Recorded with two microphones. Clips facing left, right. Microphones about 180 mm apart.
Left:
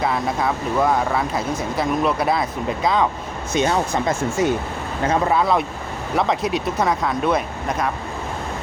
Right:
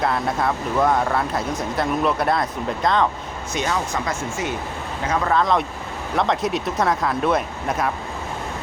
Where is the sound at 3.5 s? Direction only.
25° left (ahead or behind).